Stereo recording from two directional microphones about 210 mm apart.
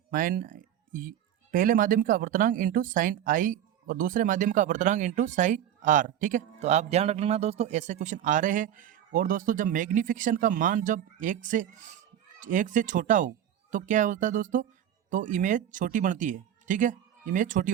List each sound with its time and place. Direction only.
0.1 s speech: 40° right (ahead or behind)